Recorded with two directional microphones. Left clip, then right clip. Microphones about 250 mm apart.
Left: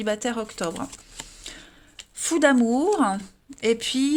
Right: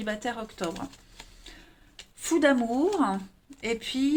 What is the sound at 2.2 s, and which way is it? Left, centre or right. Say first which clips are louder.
Speech: left 4 dB; left.